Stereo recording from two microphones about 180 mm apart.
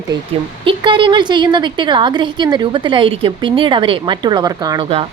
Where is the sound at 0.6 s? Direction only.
30° right (ahead or behind).